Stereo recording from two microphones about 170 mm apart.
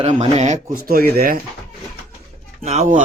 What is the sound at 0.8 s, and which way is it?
Speech, 60° right (ahead or behind).